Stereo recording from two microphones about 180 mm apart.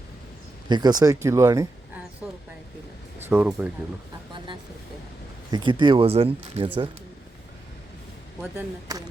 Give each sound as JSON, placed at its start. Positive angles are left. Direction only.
{"t": 0.7, "sound": "speech", "side_deg": -25}
{"t": 2.2, "sound": "a sound", "side_deg": -5}
{"t": 3.2, "sound": "speech", "side_deg": -10}
{"t": 5.5, "sound": "speech", "side_deg": -25}